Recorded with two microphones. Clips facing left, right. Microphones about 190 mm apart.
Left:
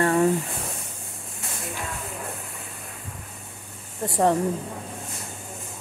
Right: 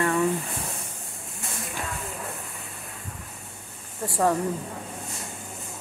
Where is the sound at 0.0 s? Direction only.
40° left (ahead or behind).